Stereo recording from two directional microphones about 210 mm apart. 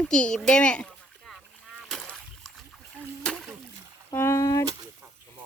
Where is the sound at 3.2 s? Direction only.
Centre (ahead or behind).